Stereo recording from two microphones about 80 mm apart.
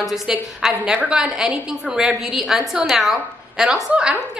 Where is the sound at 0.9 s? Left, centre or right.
Right.